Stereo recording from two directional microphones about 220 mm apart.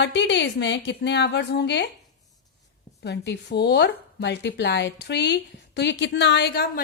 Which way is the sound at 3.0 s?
50° left (ahead or behind).